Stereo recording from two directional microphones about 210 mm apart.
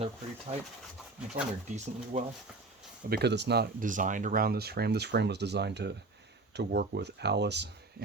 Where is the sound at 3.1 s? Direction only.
50° right (ahead or behind).